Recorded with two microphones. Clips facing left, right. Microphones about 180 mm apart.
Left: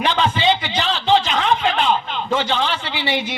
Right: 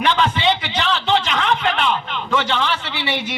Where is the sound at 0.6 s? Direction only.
60° right (ahead or behind).